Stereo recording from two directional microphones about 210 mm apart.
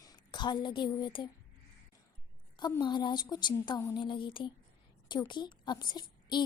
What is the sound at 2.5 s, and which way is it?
A woman's voice, 20° left (ahead or behind).